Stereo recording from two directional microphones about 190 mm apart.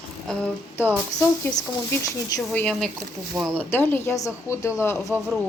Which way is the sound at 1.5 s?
20° left (ahead or behind).